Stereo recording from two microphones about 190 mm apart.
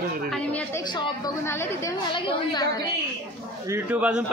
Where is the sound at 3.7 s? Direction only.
10° right (ahead or behind).